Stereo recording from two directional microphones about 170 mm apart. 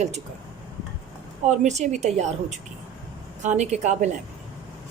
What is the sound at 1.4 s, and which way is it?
Speech, 45° right (ahead or behind).